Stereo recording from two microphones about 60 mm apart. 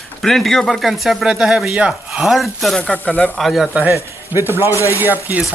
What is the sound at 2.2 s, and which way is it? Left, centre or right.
Speech, centre.